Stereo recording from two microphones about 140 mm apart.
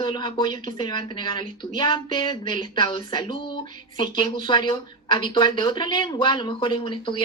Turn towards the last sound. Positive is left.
turn(degrees=35)  # may be behind; listen again after turning